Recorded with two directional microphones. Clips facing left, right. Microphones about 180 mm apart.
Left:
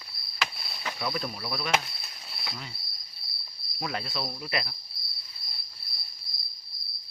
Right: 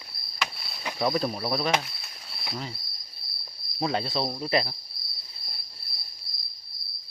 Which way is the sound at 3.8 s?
30° right (ahead or behind).